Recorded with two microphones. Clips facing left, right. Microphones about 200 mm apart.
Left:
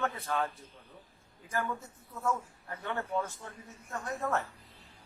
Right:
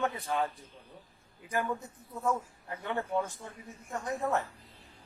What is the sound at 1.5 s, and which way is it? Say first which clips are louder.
Speech: right 2 dB; 15° right (ahead or behind).